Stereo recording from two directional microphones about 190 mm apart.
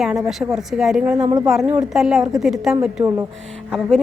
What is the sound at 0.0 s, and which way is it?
A woman's voice, 5° right (ahead or behind).